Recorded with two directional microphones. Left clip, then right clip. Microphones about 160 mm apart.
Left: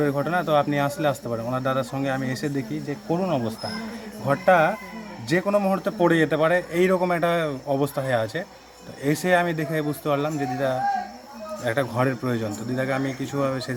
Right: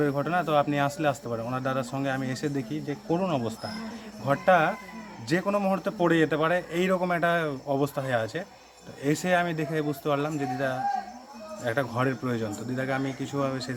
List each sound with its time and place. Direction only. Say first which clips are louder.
0.0 s a man's voice: left 3 dB; 10° right (ahead or behind)